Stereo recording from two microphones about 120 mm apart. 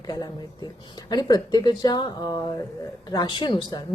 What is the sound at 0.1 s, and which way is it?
A woman's voice, 35° left (ahead or behind).